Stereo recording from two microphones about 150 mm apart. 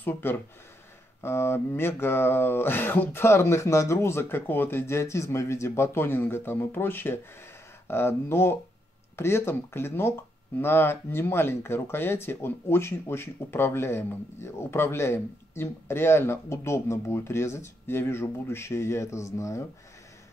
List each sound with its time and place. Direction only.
0.0 s speech: 15° left (ahead or behind)